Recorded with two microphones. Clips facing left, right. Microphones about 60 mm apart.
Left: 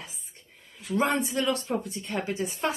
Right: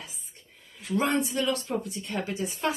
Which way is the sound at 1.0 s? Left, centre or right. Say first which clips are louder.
Left 1 dB; left.